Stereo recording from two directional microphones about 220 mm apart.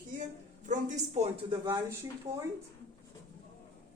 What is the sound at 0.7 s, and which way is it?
A woman's voice, 30° right (ahead or behind).